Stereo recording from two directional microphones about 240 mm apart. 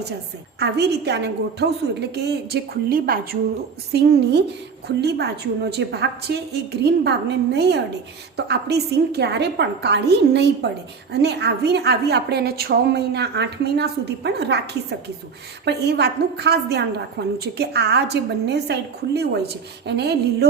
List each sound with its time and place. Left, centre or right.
0.6 s a woman's voice: right